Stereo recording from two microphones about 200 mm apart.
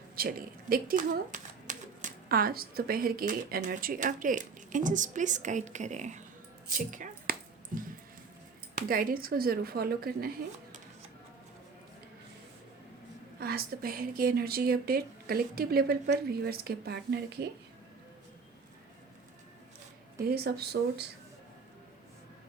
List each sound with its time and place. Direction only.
0.2 s speech: 45° right (ahead or behind)
6.7 s a sound: 40° right (ahead or behind)
8.7 s speech: 45° right (ahead or behind)
13.4 s speech: 50° right (ahead or behind)
20.2 s speech: 50° right (ahead or behind)